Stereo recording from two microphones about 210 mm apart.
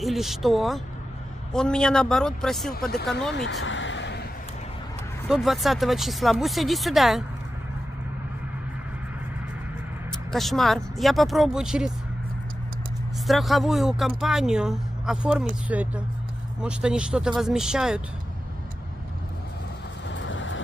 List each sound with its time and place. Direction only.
0.0 s speech: centre (ahead or behind)
3.3 s vehicle: 60° left (ahead or behind)
5.3 s speech: centre (ahead or behind)
10.3 s speech: centre (ahead or behind)
13.3 s speech: centre (ahead or behind)
20.1 s vehicle: 60° left (ahead or behind)